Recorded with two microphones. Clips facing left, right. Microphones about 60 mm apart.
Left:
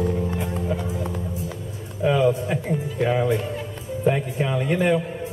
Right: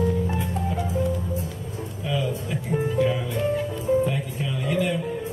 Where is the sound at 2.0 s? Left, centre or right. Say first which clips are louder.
Left 9 dB; left.